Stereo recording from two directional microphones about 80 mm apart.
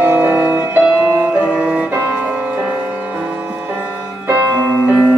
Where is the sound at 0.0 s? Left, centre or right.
Right.